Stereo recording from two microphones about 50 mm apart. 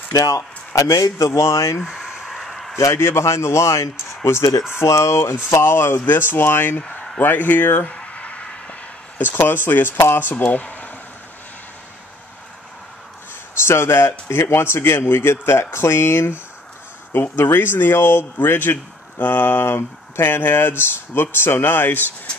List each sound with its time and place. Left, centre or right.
0.3 s speech: left
1.9 s a sound: centre
2.3 s a sound: centre
2.9 s speech: left
4.7 s speech: left
5.5 s speech: left
6.9 s speech: left
7.8 s a sound: left
9.2 s speech: left
13.6 s speech: left